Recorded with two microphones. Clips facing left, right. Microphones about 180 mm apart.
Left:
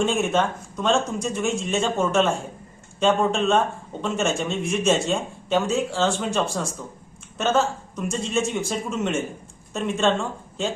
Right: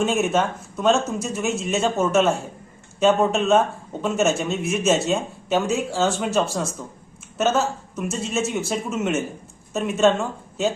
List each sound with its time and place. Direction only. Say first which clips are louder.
0.0 s speech: right 1 dB; 5° right (ahead or behind)